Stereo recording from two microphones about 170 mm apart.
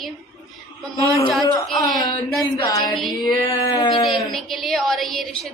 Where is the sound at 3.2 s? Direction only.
20° left (ahead or behind).